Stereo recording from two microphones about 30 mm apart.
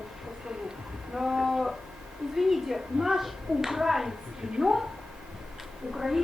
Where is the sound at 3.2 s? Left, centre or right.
Centre.